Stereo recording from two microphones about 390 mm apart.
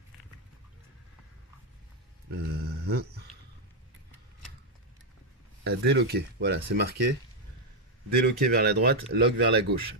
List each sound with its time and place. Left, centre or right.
2.3 s a sound: right
5.6 s speech: right
8.2 s speech: right